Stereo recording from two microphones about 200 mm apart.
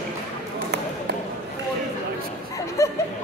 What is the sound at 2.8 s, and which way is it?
Music, 15° left (ahead or behind).